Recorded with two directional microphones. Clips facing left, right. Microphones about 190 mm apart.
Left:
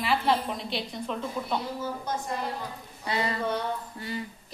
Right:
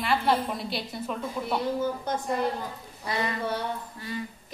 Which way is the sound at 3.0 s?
30° left (ahead or behind).